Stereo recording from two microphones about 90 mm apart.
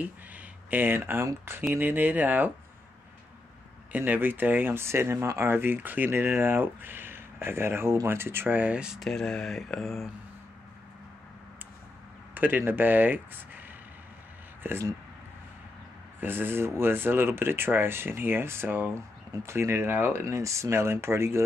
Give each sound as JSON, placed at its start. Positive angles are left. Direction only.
{"t": 0.7, "sound": "speech", "side_deg": -20}
{"t": 3.9, "sound": "speech", "side_deg": -20}
{"t": 9.0, "sound": "a sound", "side_deg": 5}
{"t": 12.4, "sound": "speech", "side_deg": -20}
{"t": 14.6, "sound": "speech", "side_deg": -25}
{"t": 16.2, "sound": "speech", "side_deg": -25}